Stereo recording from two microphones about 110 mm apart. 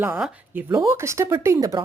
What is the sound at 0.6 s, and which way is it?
Speech, 25° right (ahead or behind).